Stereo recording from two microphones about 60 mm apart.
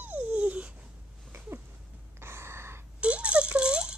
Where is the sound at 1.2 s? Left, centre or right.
Right.